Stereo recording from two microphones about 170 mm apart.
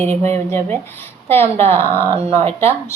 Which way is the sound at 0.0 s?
40° right (ahead or behind).